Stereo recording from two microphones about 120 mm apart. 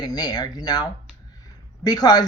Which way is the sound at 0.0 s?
35° left (ahead or behind).